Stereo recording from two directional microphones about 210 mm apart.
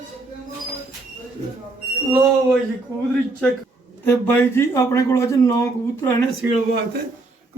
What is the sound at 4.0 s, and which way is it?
A man's voice, 10° left (ahead or behind).